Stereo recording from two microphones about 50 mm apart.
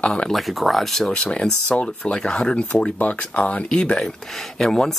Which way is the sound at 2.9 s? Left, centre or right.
Left.